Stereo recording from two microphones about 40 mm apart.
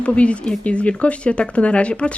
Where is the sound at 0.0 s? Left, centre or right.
Left.